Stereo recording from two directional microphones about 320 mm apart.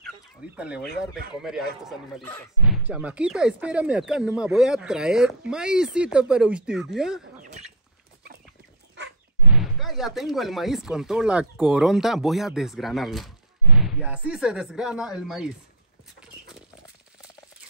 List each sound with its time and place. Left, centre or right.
0.6 s speech: centre
7.3 s bird: right
9.5 s speech: centre